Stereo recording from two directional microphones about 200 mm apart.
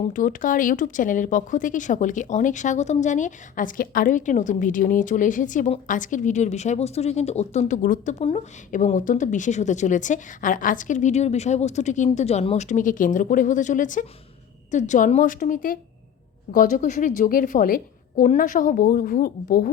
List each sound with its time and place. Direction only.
0.0 s a woman's voice: 40° left (ahead or behind)